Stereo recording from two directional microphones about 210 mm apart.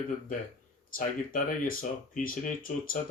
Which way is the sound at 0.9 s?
40° left (ahead or behind).